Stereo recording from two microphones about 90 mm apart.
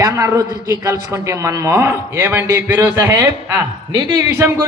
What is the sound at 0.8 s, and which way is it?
Speech, 35° right (ahead or behind).